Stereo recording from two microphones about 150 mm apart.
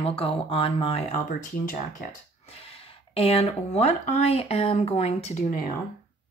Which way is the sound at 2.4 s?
40° left (ahead or behind).